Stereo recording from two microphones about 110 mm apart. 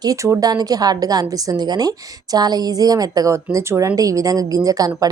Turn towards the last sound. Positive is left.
turn(degrees=-35)  # may be behind; listen again after turning